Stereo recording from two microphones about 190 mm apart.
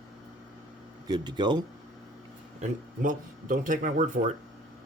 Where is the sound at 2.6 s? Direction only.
45° right (ahead or behind).